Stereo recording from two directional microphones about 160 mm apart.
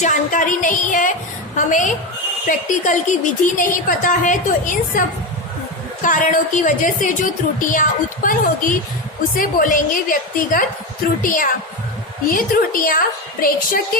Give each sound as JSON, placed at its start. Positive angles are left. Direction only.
{"t": 0.0, "sound": "a woman's voice", "side_deg": 55}